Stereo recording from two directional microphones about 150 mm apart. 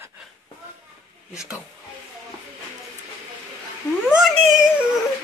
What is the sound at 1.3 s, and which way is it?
Speech, 5° right (ahead or behind).